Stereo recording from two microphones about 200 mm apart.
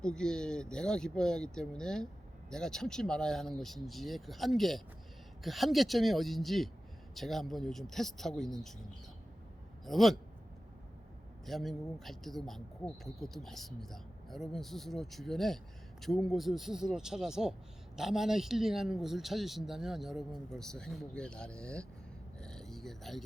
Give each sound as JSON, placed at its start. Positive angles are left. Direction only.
{"t": 0.0, "sound": "speech", "side_deg": 5}
{"t": 9.8, "sound": "a man's voice", "side_deg": 0}
{"t": 11.4, "sound": "speech", "side_deg": 0}
{"t": 22.4, "sound": "a sound", "side_deg": 5}